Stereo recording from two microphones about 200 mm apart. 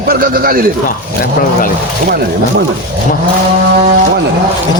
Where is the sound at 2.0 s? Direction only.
50° right (ahead or behind).